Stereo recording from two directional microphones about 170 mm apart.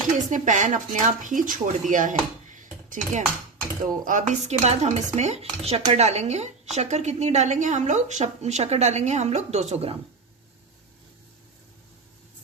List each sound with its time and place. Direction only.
0.3 s speech: 45° right (ahead or behind)
1.9 s dishes: 50° right (ahead or behind)
4.0 s speech: 45° right (ahead or behind)